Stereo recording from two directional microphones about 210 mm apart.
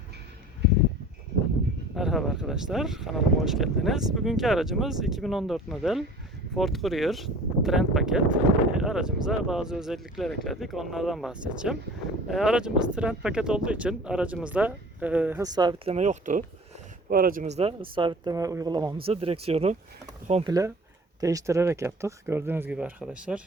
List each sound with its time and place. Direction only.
2.0 s speech: centre (ahead or behind); by 19.7 s 30° right (ahead or behind)
20.4 s speech: 15° right (ahead or behind)